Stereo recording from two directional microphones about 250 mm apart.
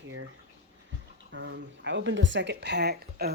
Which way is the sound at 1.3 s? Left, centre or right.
Right.